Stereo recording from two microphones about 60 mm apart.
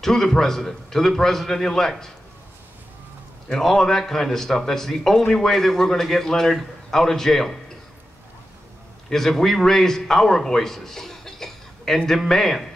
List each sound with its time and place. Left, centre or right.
0.0 s a man's voice: centre
3.5 s a man's voice: centre
9.1 s a man's voice: centre